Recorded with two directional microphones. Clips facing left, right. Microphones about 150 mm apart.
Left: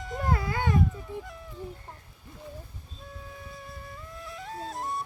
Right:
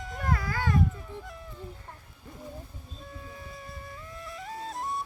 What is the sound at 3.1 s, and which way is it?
Flute, centre (ahead or behind).